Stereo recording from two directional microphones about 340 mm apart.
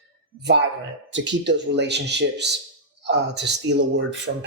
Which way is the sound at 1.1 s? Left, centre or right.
Right.